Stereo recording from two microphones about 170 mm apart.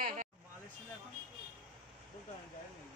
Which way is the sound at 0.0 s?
50° right (ahead or behind).